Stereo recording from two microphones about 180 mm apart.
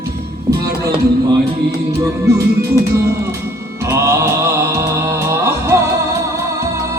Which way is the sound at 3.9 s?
15° right (ahead or behind).